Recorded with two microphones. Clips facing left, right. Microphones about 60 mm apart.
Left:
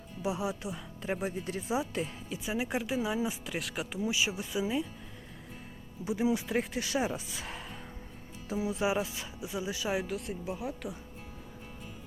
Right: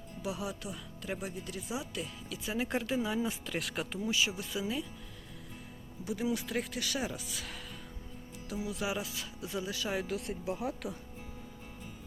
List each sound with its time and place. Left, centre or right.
0.2 s speech: left
2.4 s speech: centre
3.9 s speech: centre
6.1 s speech: left
9.5 s speech: centre